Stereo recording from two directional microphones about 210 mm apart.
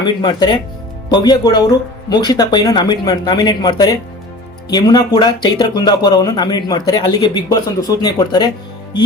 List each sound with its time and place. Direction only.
0.0 s speech: 20° left (ahead or behind)